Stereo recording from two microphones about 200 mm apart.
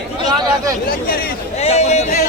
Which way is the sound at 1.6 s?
35° left (ahead or behind).